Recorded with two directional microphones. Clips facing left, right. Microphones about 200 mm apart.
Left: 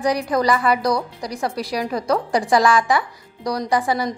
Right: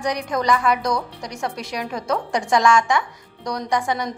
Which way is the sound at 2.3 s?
Centre (ahead or behind).